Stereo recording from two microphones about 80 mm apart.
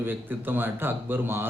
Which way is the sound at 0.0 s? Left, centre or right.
Right.